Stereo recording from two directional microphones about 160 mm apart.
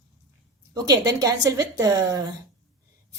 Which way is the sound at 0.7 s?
20° right (ahead or behind).